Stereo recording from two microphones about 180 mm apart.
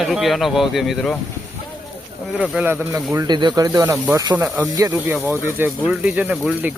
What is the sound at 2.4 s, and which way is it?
Speech, 10° right (ahead or behind).